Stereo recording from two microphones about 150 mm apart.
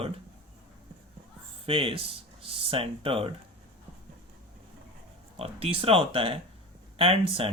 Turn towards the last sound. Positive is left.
turn(degrees=-35)  # may be behind; listen again after turning